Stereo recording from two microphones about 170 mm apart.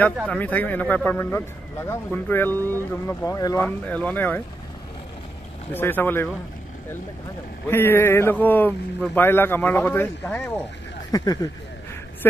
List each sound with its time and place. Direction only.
0.3 s a man's voice: 10° left (ahead or behind)
5.7 s a man's voice: 10° left (ahead or behind)
7.6 s a man's voice: 15° left (ahead or behind)